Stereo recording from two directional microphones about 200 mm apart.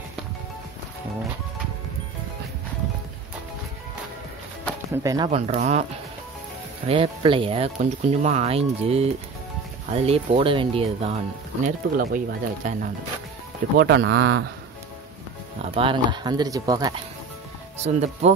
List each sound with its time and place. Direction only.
4.9 s speech: 15° right (ahead or behind)
5.3 s speech: 35° right (ahead or behind)
6.9 s speech: 25° right (ahead or behind)
11.6 s speech: 45° right (ahead or behind)
13.7 s speech: 55° right (ahead or behind)
15.7 s speech: 25° right (ahead or behind)
17.8 s speech: 35° right (ahead or behind)